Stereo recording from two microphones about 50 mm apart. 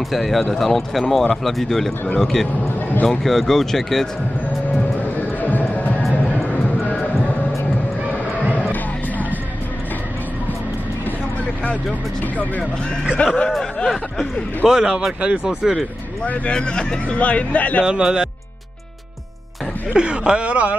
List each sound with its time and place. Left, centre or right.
0.1 s speech: centre
5.0 s music: left
6.5 s a sound: left
13.2 s speech: left
13.7 s speech: centre
14.7 s speech: centre
16.3 s speech: left
17.8 s speech: centre
19.9 s speech: centre